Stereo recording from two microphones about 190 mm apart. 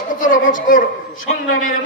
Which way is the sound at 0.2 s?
45° left (ahead or behind).